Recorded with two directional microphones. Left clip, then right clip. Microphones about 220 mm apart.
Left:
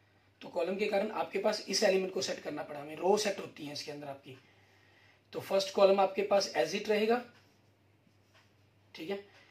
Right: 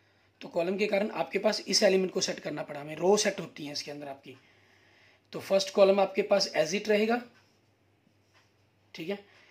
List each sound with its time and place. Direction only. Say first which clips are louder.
0.4 s speech: right 4 dB; 50° right (ahead or behind)
5.3 s speech: right 4 dB; 50° right (ahead or behind)
8.9 s speech: right 3 dB; 50° right (ahead or behind)